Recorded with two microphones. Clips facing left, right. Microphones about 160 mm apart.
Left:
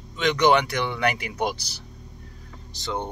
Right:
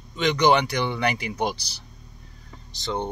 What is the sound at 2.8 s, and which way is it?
Speech, 5° left (ahead or behind).